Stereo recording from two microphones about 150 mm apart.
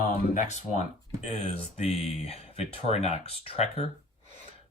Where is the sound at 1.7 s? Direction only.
45° left (ahead or behind).